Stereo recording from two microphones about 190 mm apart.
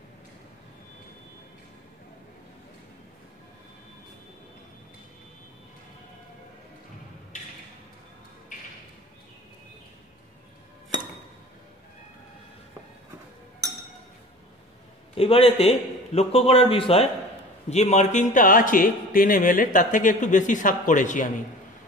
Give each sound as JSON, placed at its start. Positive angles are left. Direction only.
{"t": 15.1, "sound": "a man's voice", "side_deg": 30}